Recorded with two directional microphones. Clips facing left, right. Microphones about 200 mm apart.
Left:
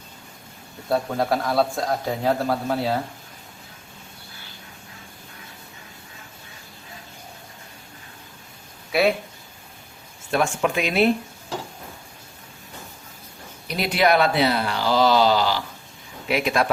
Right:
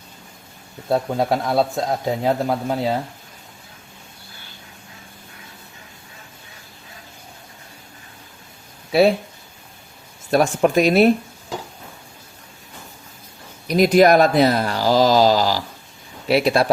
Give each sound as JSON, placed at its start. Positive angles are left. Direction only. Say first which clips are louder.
{"t": 0.9, "sound": "a man's voice", "louder": "right 3 dB", "side_deg": -20}
{"t": 8.9, "sound": "speech", "louder": "right 5 dB", "side_deg": -30}
{"t": 10.3, "sound": "speech", "louder": "right 6 dB", "side_deg": -40}
{"t": 13.7, "sound": "speech", "louder": "right 7 dB", "side_deg": -45}